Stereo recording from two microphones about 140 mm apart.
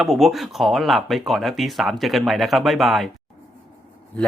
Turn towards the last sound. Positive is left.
turn(degrees=0)  # may be behind; listen again after turning